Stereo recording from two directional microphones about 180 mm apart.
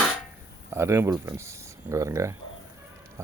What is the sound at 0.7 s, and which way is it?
Speech, 15° right (ahead or behind).